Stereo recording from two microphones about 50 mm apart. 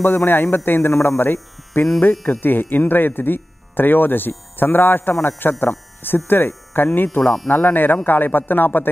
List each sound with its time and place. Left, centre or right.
0.0 s speech: left